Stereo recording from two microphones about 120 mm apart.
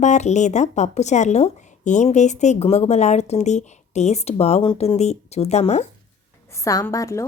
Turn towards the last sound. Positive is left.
turn(degrees=25)  # may be behind; listen again after turning